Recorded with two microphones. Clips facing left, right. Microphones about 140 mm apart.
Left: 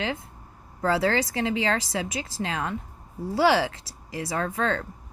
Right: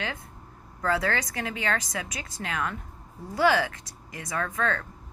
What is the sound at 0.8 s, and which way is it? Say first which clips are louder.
Speech: left 4 dB; 25° left (ahead or behind).